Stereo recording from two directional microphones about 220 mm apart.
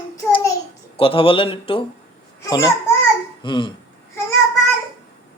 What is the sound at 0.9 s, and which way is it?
A child's voice, 25° left (ahead or behind).